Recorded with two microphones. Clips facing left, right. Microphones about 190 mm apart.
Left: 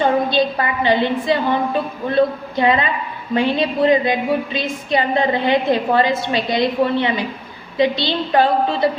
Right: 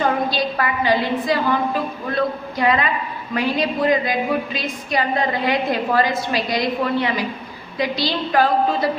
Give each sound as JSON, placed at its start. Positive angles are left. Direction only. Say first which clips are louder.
{"t": 0.0, "sound": "a woman's voice", "louder": "left 4 dB", "side_deg": 25}